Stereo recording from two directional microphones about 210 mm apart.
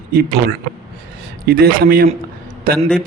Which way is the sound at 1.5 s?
45° right (ahead or behind).